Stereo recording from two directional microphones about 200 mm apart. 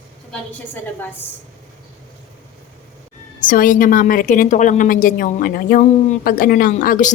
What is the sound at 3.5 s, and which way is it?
A woman's voice, 45° left (ahead or behind).